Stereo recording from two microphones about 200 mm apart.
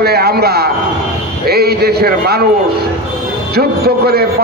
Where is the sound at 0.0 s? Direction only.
50° right (ahead or behind).